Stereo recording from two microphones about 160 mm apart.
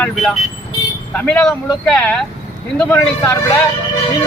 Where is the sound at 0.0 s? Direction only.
Centre (ahead or behind).